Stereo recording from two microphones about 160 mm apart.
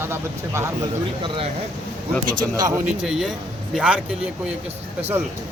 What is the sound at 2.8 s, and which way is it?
Speech, 5° right (ahead or behind).